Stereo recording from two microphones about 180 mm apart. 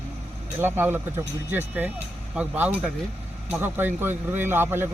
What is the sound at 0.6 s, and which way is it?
Speech, 10° right (ahead or behind).